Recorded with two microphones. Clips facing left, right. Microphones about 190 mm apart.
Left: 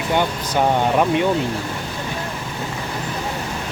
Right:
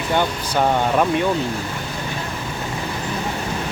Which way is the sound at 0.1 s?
15° left (ahead or behind).